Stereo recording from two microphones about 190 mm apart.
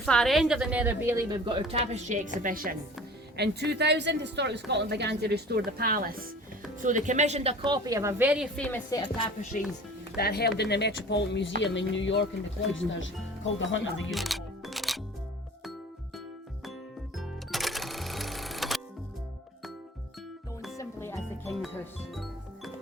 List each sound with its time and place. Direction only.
0.0 s a woman's voice: centre (ahead or behind); by 1.6 s 20° right (ahead or behind)
1.7 s a woman's voice: 35° right (ahead or behind)
3.3 s a woman's voice: 60° right (ahead or behind); by 8.4 s 10° right (ahead or behind)
8.5 s a woman's voice: 5° left (ahead or behind)
9.5 s speech: 45° left (ahead or behind)
10.2 s speech: 55° left (ahead or behind); by 13.9 s 80° left
14.1 s music: centre (ahead or behind)
17.2 s cash register: centre (ahead or behind)
20.7 s music: 15° left (ahead or behind)
22.1 s music: centre (ahead or behind)